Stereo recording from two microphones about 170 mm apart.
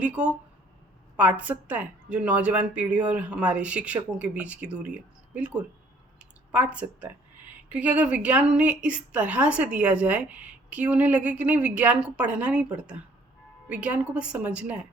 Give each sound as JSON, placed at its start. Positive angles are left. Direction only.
{"t": 0.2, "sound": "a woman's voice", "side_deg": -5}
{"t": 6.5, "sound": "a woman's voice", "side_deg": -10}
{"t": 13.7, "sound": "a woman's voice", "side_deg": -10}